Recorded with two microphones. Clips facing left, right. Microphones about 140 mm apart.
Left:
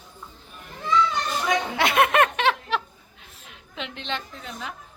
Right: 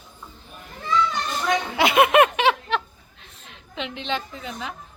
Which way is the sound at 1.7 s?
5° right (ahead or behind).